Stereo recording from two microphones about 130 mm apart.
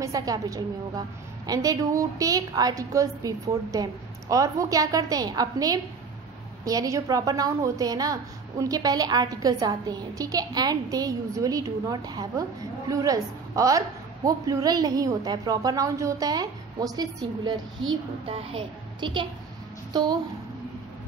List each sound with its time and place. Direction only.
0.0 s a woman's voice: 25° right (ahead or behind)
18.3 s a woman's voice: 40° right (ahead or behind)